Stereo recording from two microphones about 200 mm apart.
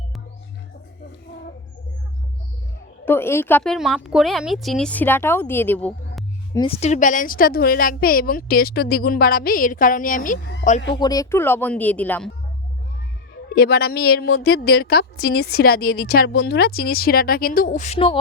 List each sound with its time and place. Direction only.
3.1 s a woman's voice: 10° left (ahead or behind)
6.6 s a woman's voice: 30° left (ahead or behind)
10.9 s a woman's voice: 20° left (ahead or behind)
13.6 s a woman's voice: 50° left (ahead or behind); by 18.2 s 30° left (ahead or behind)